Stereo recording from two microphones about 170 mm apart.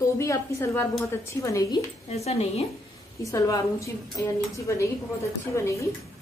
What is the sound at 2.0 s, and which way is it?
Speech, 40° left (ahead or behind).